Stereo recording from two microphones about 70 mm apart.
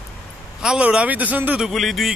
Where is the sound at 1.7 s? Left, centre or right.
Centre.